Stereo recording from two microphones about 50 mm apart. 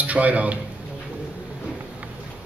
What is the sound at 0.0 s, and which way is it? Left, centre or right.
Speech, right.